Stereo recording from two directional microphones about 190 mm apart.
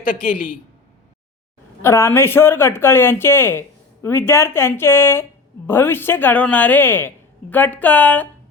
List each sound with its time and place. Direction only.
0.0 s a man's voice: 45° left (ahead or behind)
1.8 s speech: 15° left (ahead or behind)